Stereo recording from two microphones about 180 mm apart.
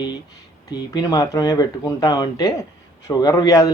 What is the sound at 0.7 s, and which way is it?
Speech, 20° left (ahead or behind).